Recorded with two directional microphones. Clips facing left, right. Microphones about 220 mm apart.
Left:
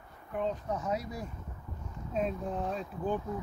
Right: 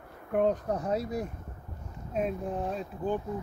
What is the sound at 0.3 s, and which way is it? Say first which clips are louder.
Speech: right 7 dB; 55° right (ahead or behind).